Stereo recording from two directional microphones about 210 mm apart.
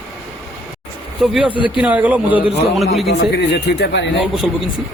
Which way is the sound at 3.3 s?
50° left (ahead or behind).